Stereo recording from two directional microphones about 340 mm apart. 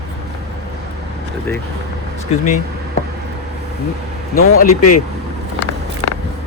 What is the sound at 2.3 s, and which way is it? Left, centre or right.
Speech, centre.